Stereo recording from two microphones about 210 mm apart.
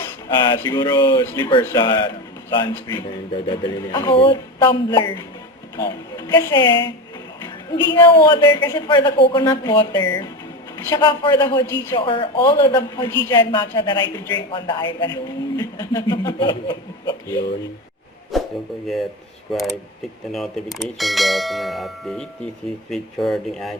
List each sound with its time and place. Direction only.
0.0 s a man's voice: 20° left (ahead or behind)
12.5 s a man's voice: 15° left (ahead or behind)
18.3 s a sound: centre (ahead or behind)
19.5 s speech: centre (ahead or behind)